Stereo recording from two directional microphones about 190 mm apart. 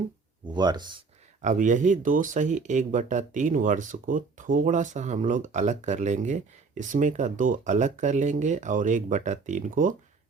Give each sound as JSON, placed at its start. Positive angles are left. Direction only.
{"t": 0.4, "sound": "speech", "side_deg": -20}
{"t": 1.4, "sound": "speech", "side_deg": -40}